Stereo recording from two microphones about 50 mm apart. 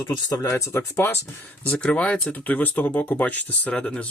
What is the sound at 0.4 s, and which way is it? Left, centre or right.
Speech, left.